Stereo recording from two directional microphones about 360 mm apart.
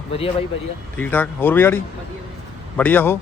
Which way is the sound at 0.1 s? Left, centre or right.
Centre.